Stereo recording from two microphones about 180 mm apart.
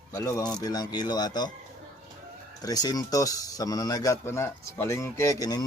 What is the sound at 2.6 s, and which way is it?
A man's voice, 20° left (ahead or behind).